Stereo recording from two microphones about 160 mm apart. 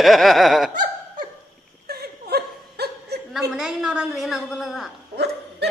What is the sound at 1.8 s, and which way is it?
Laughter, 75° right (ahead or behind).